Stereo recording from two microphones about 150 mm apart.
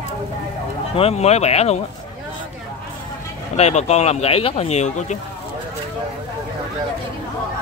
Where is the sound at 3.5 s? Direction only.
45° left (ahead or behind).